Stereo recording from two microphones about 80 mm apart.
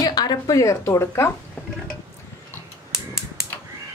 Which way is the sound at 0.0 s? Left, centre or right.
Left.